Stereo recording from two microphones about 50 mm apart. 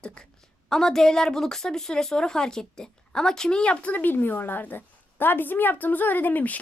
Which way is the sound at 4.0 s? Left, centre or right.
Left.